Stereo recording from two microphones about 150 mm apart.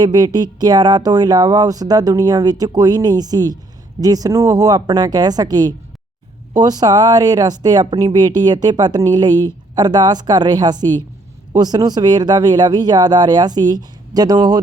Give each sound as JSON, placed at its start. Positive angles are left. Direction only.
{"t": 0.0, "sound": "speech", "side_deg": -25}